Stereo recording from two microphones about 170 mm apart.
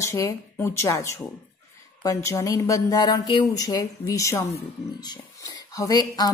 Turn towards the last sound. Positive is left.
turn(degrees=25)  # may be behind; listen again after turning